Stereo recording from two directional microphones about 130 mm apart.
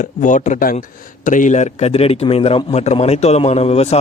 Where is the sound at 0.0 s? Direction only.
80° left.